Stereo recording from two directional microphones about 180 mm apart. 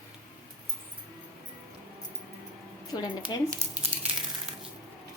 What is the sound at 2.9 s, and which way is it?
Speech, 20° left (ahead or behind).